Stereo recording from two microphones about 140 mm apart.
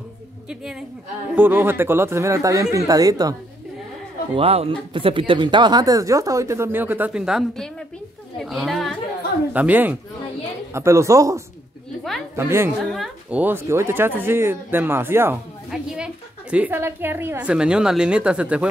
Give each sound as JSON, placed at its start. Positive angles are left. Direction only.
{"t": 0.5, "sound": "a woman's voice", "side_deg": -5}
{"t": 1.3, "sound": "a woman's voice", "side_deg": -15}
{"t": 4.4, "sound": "a woman's voice", "side_deg": -45}
{"t": 9.5, "sound": "a woman's voice", "side_deg": -10}
{"t": 12.9, "sound": "a woman's voice", "side_deg": 0}
{"t": 13.4, "sound": "a woman's voice", "side_deg": -15}